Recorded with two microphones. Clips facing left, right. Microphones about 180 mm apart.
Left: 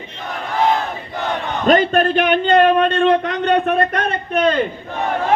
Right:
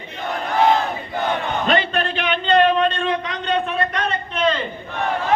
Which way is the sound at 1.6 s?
45° left (ahead or behind).